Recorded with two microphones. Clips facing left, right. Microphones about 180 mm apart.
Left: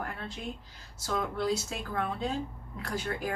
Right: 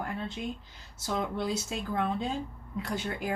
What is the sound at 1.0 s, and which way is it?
Speech, 20° right (ahead or behind).